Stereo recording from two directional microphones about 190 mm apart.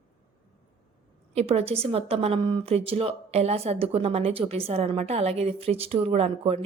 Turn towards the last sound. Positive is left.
turn(degrees=-30)  # may be behind; listen again after turning